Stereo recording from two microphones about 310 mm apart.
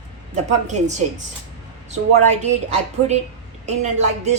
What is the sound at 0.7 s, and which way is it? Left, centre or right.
Speech, right.